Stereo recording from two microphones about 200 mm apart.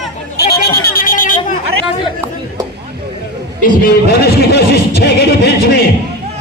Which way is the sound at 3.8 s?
50° left (ahead or behind).